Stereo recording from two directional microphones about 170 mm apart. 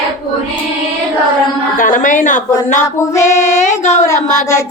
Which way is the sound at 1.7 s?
50° left (ahead or behind).